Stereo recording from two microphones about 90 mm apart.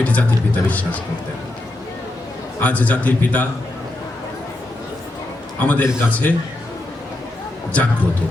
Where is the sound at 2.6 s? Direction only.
15° left (ahead or behind).